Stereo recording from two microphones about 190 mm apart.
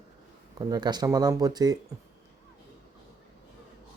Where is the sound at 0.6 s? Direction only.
20° right (ahead or behind).